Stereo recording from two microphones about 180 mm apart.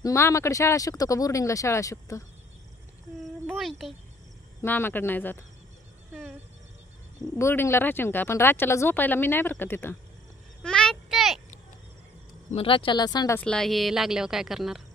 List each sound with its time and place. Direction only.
0.0 s speech: 15° left (ahead or behind)
3.4 s a child's voice: centre (ahead or behind)
4.6 s speech: 10° left (ahead or behind)
7.3 s speech: 15° left (ahead or behind)
10.6 s a sound: 5° left (ahead or behind)
12.4 s speech: 30° left (ahead or behind)
13.4 s speech: 5° left (ahead or behind)